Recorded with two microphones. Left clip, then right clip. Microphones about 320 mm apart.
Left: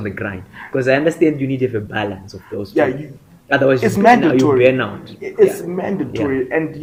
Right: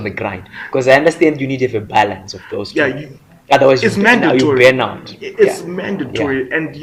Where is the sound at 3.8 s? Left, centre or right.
Left.